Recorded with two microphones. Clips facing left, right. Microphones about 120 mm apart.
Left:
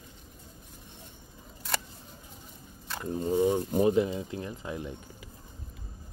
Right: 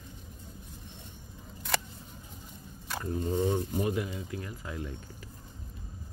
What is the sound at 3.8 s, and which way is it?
Speech, 25° left (ahead or behind).